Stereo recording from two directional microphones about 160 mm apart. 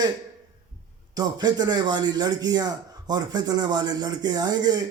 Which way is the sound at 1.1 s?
25° right (ahead or behind).